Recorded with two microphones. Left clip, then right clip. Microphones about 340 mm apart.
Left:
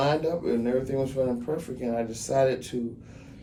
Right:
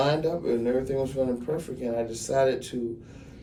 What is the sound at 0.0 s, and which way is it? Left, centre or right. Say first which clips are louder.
Speech: even; left.